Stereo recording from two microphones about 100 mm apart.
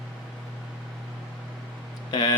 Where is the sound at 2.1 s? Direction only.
45° left (ahead or behind).